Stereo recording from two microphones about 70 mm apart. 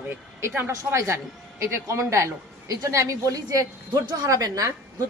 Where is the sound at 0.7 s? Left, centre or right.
Right.